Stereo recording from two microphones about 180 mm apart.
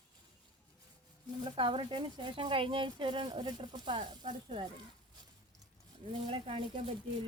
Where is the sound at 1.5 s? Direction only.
25° right (ahead or behind).